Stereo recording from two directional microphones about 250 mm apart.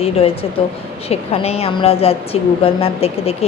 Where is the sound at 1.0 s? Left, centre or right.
Left.